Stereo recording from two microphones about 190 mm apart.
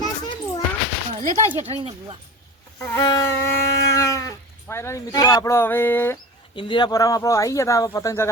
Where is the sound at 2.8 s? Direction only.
20° left (ahead or behind).